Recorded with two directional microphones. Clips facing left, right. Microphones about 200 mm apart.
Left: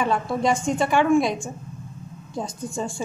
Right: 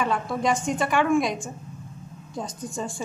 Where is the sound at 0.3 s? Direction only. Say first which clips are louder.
Left 2 dB; 25° left (ahead or behind).